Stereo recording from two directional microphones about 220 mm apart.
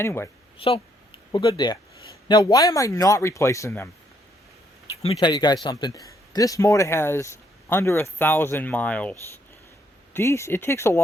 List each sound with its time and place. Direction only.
0.0 s speech: 10° left (ahead or behind)
0.6 s speech: 25° left (ahead or behind)
5.2 s speech: 20° left (ahead or behind)
10.2 s speech: 10° left (ahead or behind)